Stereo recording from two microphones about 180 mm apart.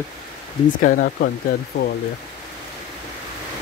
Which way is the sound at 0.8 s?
50° left (ahead or behind).